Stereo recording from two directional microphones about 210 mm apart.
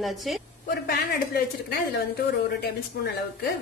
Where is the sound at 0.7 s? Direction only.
45° left (ahead or behind).